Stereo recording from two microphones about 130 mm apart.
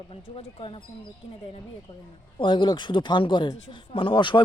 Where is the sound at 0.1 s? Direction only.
45° left (ahead or behind).